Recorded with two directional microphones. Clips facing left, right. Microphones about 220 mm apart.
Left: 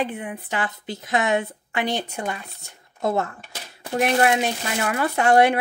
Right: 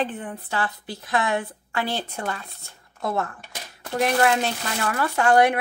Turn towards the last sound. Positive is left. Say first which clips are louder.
# left 1 dB
turn(degrees=25)  # may be behind; listen again after turning